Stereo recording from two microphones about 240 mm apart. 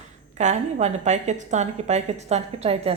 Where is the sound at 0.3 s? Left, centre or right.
Right.